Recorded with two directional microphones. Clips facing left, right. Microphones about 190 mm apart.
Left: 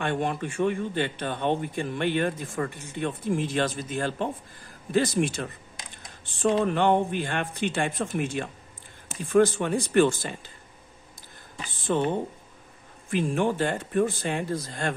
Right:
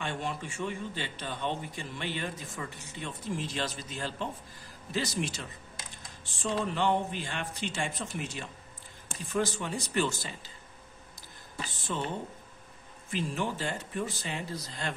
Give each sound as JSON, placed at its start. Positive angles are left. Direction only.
{"t": 0.0, "sound": "speech", "side_deg": 55}
{"t": 11.9, "sound": "speech", "side_deg": 55}